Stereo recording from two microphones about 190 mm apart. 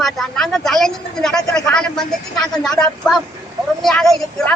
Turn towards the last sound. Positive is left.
turn(degrees=0)  # may be behind; listen again after turning